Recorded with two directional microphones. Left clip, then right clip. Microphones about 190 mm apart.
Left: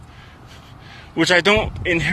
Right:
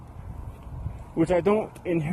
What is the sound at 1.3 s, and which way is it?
Speech, 5° left (ahead or behind).